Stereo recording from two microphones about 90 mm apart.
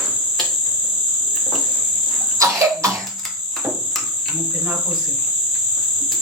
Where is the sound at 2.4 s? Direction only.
35° right (ahead or behind).